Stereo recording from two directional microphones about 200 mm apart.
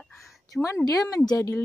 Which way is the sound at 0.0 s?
Centre (ahead or behind).